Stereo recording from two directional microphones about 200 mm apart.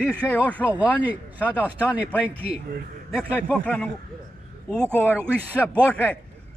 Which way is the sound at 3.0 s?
5° left (ahead or behind).